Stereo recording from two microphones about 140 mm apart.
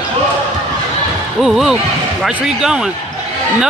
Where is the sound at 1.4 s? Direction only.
5° right (ahead or behind).